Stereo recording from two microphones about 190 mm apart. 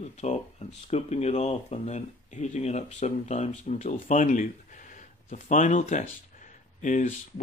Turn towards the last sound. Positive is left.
turn(degrees=40)  # may be behind; listen again after turning